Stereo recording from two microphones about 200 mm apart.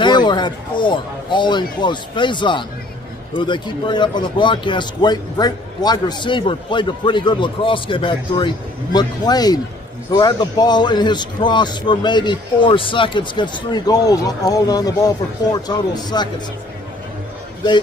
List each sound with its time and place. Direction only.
0.0 s a man's voice: 20° left (ahead or behind)